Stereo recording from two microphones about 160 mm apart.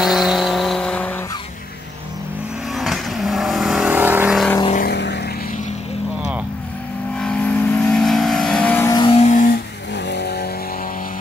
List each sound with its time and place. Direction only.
0.0 s vehicle: centre (ahead or behind)
2.7 s vehicle: centre (ahead or behind)
4.7 s vehicle: 85° left
7.2 s vehicle: 5° left (ahead or behind)
8.9 s vehicle: 30° left (ahead or behind)
9.2 s vehicle: 55° left (ahead or behind); by 10.5 s 85° left